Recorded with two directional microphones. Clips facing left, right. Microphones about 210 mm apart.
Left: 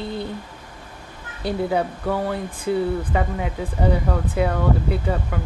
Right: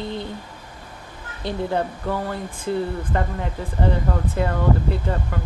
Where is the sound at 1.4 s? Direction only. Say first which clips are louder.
Left 2 dB; 10° left (ahead or behind).